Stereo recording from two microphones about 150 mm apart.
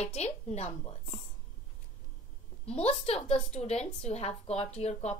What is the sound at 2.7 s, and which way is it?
A woman's voice, 45° left (ahead or behind).